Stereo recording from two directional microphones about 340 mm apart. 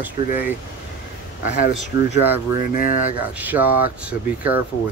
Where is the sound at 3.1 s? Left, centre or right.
Centre.